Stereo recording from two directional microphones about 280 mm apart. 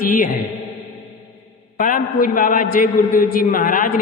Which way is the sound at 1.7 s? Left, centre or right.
Left.